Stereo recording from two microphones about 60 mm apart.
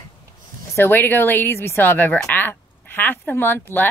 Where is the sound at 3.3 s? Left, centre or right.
Left.